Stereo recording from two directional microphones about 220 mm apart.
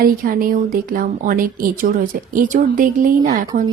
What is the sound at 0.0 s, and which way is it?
Speech, 40° right (ahead or behind).